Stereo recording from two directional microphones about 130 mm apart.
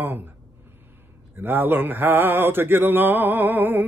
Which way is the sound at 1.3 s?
15° right (ahead or behind).